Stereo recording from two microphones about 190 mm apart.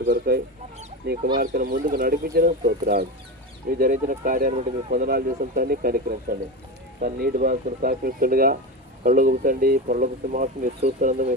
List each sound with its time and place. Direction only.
0.0 s speech: 55° right (ahead or behind)
1.4 s speech: 50° right (ahead or behind)